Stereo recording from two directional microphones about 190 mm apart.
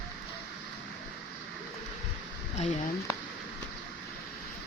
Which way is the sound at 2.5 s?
35° left (ahead or behind).